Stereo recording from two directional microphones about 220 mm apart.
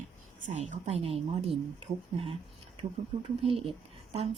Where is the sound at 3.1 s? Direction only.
25° right (ahead or behind).